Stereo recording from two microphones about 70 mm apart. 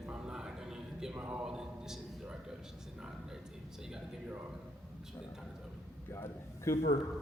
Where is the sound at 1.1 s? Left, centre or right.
Right.